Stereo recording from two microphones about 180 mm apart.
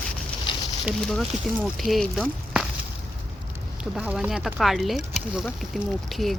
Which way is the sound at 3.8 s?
5° right (ahead or behind).